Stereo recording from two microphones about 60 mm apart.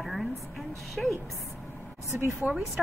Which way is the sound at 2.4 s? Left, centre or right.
Right.